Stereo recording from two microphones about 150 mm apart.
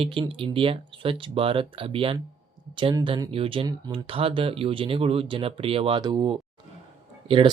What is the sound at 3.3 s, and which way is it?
Speech, 35° right (ahead or behind).